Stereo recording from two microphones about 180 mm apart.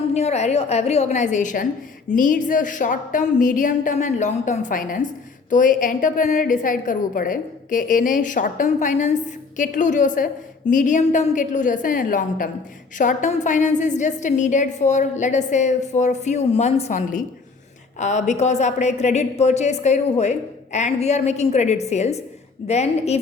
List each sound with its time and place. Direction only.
0.1 s a woman's voice: 35° left (ahead or behind)